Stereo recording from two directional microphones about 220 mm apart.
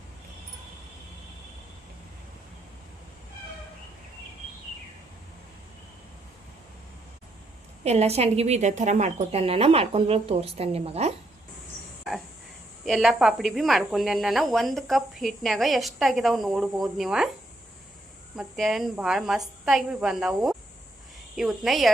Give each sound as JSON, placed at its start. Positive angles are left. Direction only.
{"t": 7.9, "sound": "a woman's voice", "side_deg": -30}
{"t": 12.1, "sound": "a sound", "side_deg": 0}
{"t": 12.8, "sound": "speech", "side_deg": 0}
{"t": 18.3, "sound": "speech", "side_deg": 0}